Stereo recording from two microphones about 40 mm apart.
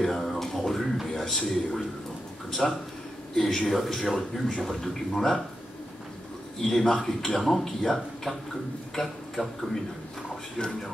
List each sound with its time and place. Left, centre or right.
0.0 s music: centre
1.0 s speech: centre
2.6 s a man's voice: centre
6.6 s a man's voice: centre
10.6 s speech: left